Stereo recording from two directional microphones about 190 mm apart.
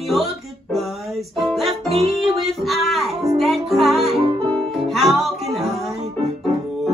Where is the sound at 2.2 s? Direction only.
Centre (ahead or behind).